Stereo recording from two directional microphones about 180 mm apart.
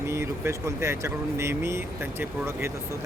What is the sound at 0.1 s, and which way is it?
Speech, 15° right (ahead or behind).